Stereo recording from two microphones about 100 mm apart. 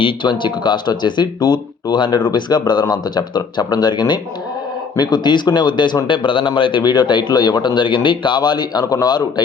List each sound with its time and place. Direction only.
0.0 s speech: 50° left (ahead or behind)